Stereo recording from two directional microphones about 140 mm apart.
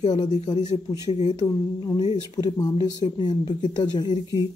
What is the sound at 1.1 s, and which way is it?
Speech, 55° left (ahead or behind).